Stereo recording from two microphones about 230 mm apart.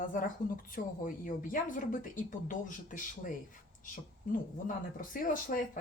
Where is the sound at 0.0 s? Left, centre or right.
Left.